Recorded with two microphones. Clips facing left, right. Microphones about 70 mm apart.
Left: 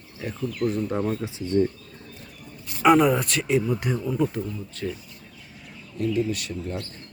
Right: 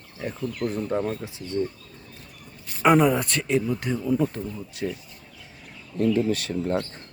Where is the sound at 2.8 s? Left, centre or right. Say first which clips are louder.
Left 1 dB; centre.